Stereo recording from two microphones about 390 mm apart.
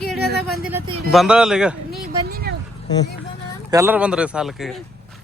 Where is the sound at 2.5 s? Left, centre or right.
Right.